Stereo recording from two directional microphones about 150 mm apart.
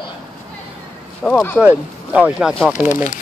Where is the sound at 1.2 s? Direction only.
Centre (ahead or behind).